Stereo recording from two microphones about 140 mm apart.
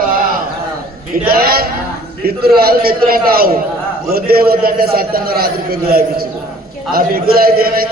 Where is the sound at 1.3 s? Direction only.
90° right.